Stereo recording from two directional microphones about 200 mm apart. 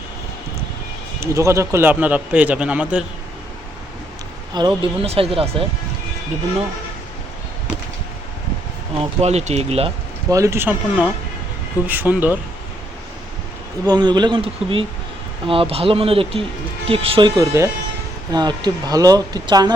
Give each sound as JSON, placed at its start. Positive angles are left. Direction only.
{"t": 1.2, "sound": "speech", "side_deg": -15}
{"t": 4.5, "sound": "speech", "side_deg": -25}
{"t": 9.0, "sound": "speech", "side_deg": -35}
{"t": 10.2, "sound": "speech", "side_deg": -15}
{"t": 13.8, "sound": "speech", "side_deg": -20}